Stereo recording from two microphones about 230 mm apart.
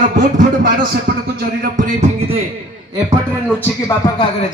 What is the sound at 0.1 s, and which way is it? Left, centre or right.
A man's voice, right.